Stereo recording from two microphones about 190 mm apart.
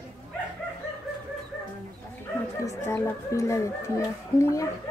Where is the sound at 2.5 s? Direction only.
15° left (ahead or behind).